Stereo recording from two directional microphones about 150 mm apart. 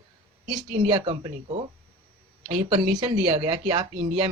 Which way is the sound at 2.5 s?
40° right (ahead or behind).